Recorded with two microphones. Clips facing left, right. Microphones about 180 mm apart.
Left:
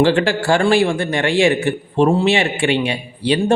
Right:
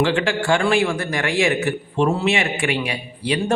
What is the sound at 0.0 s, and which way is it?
A man's voice, 40° left (ahead or behind).